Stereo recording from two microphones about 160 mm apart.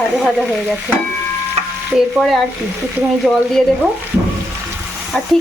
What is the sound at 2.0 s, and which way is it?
Speech, centre (ahead or behind).